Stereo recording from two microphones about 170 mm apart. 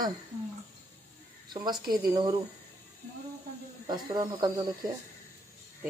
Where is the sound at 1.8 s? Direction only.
60° right (ahead or behind).